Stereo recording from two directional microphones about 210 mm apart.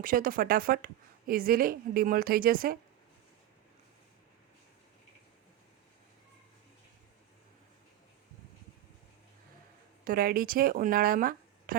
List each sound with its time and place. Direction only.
0.0 s a woman's voice: 40° right (ahead or behind)
10.0 s speech: 45° right (ahead or behind)